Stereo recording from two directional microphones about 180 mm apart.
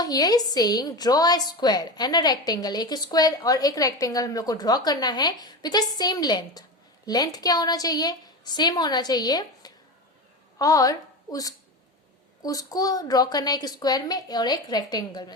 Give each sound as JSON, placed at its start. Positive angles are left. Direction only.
{"t": 0.0, "sound": "a woman's voice", "side_deg": 20}